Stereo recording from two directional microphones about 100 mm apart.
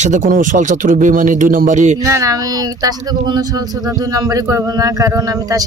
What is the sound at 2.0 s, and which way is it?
Speech, 35° right (ahead or behind).